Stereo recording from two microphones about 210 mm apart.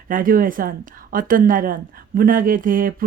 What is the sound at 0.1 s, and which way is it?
Speech, 40° right (ahead or behind).